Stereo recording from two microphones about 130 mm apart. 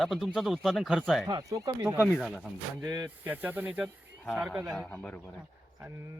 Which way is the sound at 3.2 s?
15° right (ahead or behind).